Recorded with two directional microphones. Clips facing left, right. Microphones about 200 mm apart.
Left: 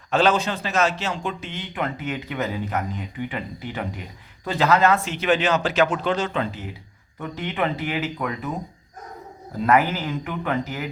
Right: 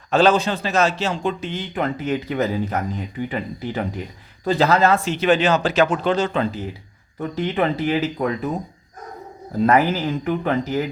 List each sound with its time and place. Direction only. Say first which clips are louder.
0.1 s a man's voice: right 4 dB; 35° right (ahead or behind)
9.6 s a man's voice: right 3 dB; 35° right (ahead or behind)